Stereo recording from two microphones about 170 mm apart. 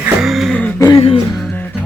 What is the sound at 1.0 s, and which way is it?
Music, 35° left (ahead or behind).